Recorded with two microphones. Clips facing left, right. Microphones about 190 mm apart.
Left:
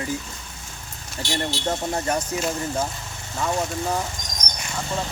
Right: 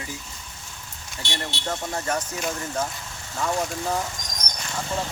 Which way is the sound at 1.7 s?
20° left (ahead or behind).